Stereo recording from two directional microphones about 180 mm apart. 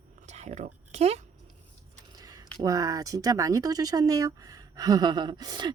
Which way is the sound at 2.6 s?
20° right (ahead or behind).